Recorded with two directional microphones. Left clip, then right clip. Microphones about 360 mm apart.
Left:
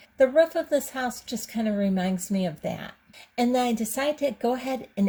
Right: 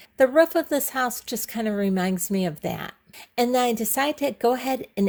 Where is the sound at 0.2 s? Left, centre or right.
Right.